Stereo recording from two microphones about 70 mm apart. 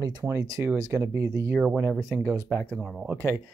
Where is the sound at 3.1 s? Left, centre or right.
Right.